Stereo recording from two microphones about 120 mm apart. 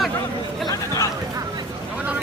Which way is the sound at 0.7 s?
30° left (ahead or behind).